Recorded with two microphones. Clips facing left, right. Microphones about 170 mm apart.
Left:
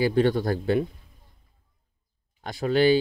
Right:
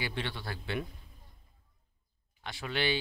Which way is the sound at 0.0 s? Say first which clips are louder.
Left 16 dB; 40° left (ahead or behind).